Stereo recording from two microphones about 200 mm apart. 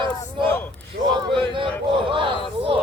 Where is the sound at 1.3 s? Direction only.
25° right (ahead or behind).